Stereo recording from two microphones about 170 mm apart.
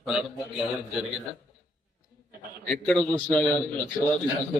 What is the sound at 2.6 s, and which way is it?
Speech, 5° left (ahead or behind).